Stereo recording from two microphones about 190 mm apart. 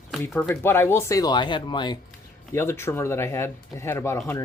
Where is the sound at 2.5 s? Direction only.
15° left (ahead or behind).